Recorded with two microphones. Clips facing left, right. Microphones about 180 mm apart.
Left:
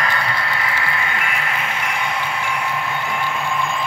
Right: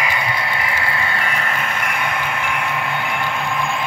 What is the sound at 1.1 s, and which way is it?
Vehicle, 40° right (ahead or behind).